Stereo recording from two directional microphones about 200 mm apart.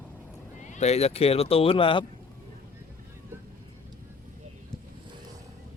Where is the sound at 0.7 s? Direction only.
35° left (ahead or behind).